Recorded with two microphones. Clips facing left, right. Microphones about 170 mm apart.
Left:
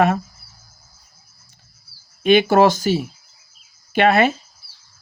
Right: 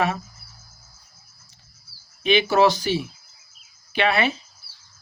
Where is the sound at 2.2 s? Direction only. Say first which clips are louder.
Left 5 dB; 50° left (ahead or behind).